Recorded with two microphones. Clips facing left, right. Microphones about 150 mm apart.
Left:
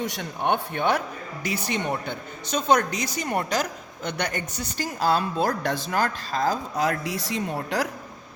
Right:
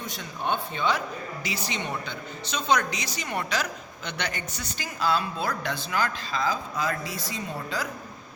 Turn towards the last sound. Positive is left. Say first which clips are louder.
# left 6 dB
turn(degrees=70)  # may be behind; listen again after turning